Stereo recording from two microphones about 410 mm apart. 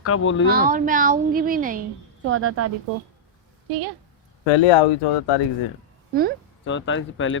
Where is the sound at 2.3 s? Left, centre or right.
Right.